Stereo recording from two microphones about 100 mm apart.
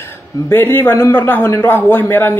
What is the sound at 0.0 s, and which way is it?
A man's voice, 20° left (ahead or behind).